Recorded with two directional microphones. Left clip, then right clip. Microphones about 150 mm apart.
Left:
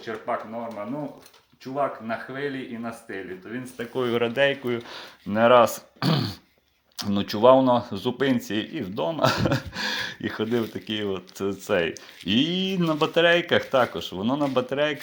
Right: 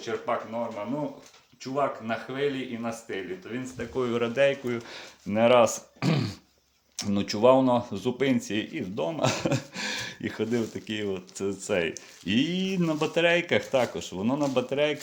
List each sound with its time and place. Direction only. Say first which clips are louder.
0.3 s speech: left 1 dB; 5° right (ahead or behind)
1.7 s speech: left 1 dB; 5° right (ahead or behind)
3.8 s speech: left 5 dB; 30° left (ahead or behind)
4.1 s speech: left 2 dB; centre (ahead or behind)